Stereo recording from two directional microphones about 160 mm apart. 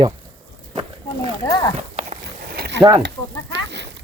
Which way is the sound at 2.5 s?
85° right.